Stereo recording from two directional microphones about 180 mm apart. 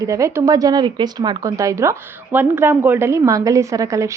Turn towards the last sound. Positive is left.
turn(degrees=-15)  # may be behind; listen again after turning